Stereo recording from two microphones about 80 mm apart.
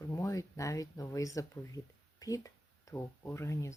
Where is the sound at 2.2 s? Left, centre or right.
Left.